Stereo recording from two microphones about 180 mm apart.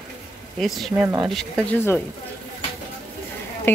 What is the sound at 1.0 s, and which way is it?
Speech, 20° right (ahead or behind).